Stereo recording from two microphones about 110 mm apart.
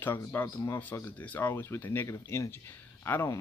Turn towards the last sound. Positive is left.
turn(degrees=25)  # may be behind; listen again after turning